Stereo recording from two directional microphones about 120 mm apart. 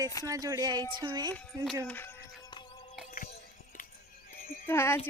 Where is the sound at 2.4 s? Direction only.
45° left (ahead or behind).